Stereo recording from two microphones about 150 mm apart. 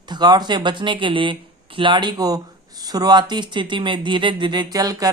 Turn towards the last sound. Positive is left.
turn(degrees=-25)  # may be behind; listen again after turning